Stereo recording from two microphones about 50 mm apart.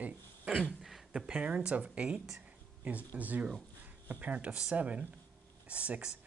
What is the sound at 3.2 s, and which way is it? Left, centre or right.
Speech, right.